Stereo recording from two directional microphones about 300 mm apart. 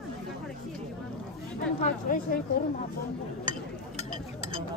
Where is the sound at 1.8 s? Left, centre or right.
Left.